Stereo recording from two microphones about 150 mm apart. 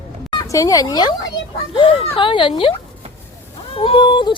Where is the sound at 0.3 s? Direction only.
25° left (ahead or behind).